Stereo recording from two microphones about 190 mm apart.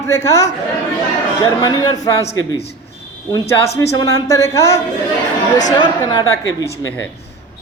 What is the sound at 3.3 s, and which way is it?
A man's voice, 15° left (ahead or behind).